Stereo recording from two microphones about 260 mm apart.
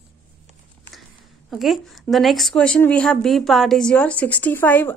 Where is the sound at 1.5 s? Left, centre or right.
Centre.